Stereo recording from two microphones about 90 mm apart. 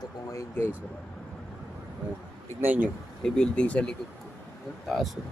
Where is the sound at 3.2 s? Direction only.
10° left (ahead or behind).